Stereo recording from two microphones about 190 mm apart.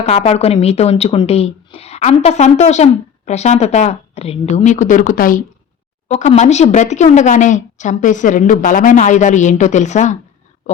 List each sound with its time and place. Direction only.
0.0 s speech: 35° left (ahead or behind)